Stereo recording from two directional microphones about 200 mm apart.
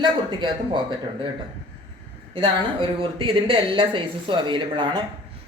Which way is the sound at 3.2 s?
25° right (ahead or behind).